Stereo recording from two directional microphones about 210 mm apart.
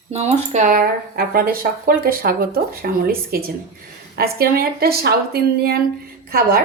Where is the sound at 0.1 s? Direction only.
30° right (ahead or behind); by 5.8 s 45° right (ahead or behind).